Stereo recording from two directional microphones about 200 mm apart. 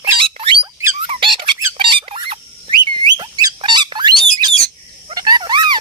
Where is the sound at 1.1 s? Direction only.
25° right (ahead or behind).